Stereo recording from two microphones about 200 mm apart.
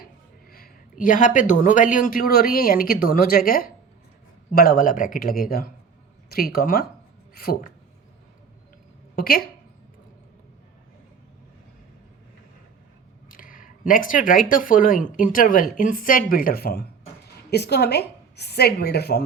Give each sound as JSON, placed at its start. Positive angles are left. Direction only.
{"t": 0.5, "sound": "speech", "side_deg": 45}
{"t": 9.1, "sound": "speech", "side_deg": 45}
{"t": 13.2, "sound": "a woman's voice", "side_deg": 45}